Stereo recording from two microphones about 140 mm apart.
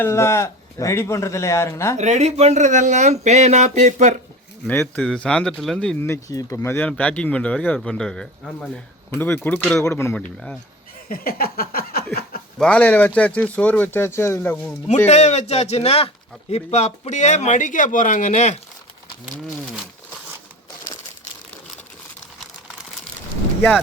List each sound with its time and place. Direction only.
0.0 s a man's voice: 20° left (ahead or behind)
2.0 s speech: 55° right (ahead or behind)
4.6 s speech: 10° left (ahead or behind)
6.0 s a man's voice: 20° left (ahead or behind)
10.2 s speech: 10° left (ahead or behind)
11.1 s a sound: 90° left
12.5 s speech: 10° left (ahead or behind)
14.8 s speech: 55° left (ahead or behind)